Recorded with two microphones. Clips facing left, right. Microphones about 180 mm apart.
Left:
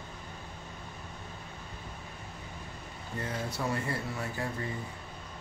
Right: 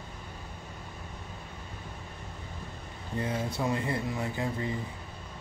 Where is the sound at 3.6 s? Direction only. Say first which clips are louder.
Right 2 dB; 15° right (ahead or behind).